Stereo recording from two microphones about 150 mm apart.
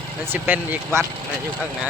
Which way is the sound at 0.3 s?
15° right (ahead or behind).